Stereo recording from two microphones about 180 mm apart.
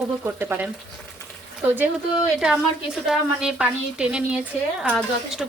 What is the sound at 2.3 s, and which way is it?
A woman's voice, 5° right (ahead or behind).